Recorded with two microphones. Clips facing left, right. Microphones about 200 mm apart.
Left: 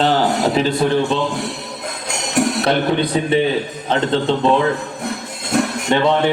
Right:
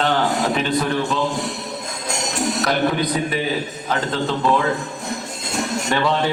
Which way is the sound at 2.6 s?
30° left (ahead or behind).